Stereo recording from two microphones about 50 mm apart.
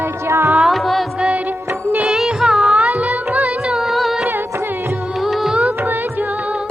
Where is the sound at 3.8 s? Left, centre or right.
Centre.